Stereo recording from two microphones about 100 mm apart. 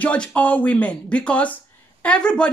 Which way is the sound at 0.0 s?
15° left (ahead or behind).